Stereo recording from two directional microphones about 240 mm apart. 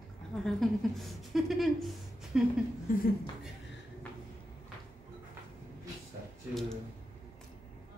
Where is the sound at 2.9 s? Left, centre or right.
Left.